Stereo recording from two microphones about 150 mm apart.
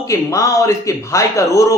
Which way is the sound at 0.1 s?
20° left (ahead or behind).